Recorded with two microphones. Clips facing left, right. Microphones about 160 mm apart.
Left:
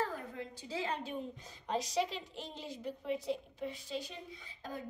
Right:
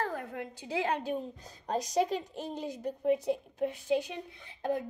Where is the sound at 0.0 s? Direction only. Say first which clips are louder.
Right 3 dB; 65° right (ahead or behind).